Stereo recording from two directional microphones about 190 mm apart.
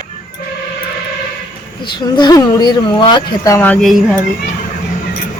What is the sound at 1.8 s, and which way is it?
Speech, 25° left (ahead or behind).